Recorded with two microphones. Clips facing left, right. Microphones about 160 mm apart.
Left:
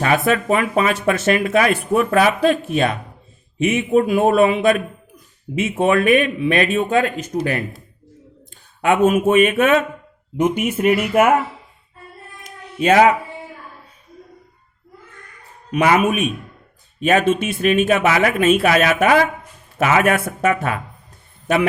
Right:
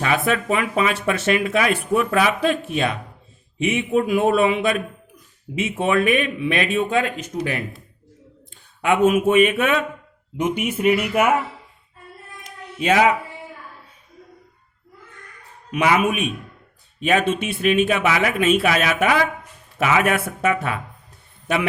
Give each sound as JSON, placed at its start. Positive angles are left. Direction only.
{"t": 0.0, "sound": "speech", "side_deg": 45}
{"t": 8.8, "sound": "speech", "side_deg": 45}
{"t": 12.4, "sound": "a sound", "side_deg": 45}
{"t": 15.7, "sound": "a man's voice", "side_deg": 45}